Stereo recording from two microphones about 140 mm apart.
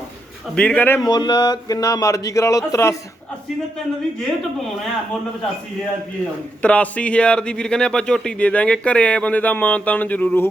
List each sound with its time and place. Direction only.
0.5 s a man's voice: 10° left (ahead or behind)
1.0 s speech: 30° left (ahead or behind)
6.6 s a man's voice: 10° left (ahead or behind)